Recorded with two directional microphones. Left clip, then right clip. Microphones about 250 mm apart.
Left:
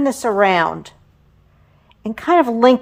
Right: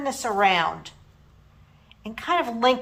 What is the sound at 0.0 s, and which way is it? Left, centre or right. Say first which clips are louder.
Speech: left 6 dB; left.